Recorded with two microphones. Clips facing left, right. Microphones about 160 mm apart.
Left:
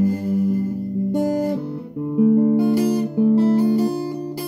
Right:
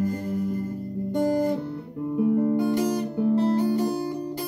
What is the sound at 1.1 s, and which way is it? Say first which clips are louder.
Guitar: left 2 dB; 10° left (ahead or behind).